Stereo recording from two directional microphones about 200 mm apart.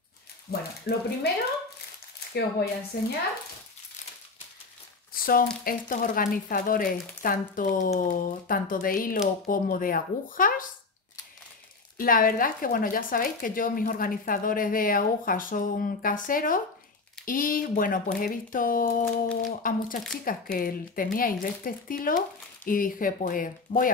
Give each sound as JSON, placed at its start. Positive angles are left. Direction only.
{"t": 0.5, "sound": "speech", "side_deg": 50}
{"t": 2.9, "sound": "speech", "side_deg": 50}
{"t": 5.1, "sound": "speech", "side_deg": 45}
{"t": 12.0, "sound": "speech", "side_deg": 45}